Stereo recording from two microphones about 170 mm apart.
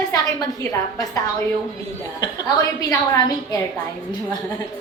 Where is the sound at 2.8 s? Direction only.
20° left (ahead or behind).